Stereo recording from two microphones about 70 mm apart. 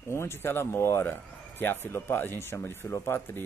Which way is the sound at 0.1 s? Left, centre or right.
Left.